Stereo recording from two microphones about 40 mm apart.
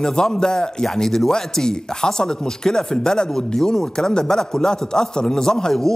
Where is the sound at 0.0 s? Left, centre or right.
Centre.